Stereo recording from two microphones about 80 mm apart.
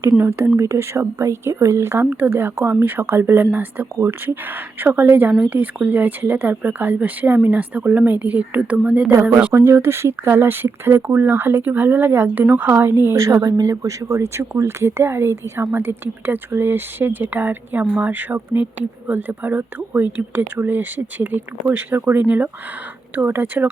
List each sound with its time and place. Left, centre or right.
0.2 s speech: right
9.5 s speech: right